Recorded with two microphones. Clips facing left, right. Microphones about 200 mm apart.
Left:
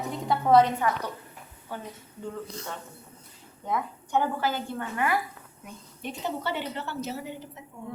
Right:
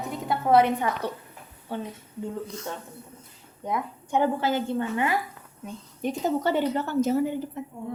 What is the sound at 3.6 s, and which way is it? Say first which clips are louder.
A woman's voice: right 1 dB; 15° right (ahead or behind).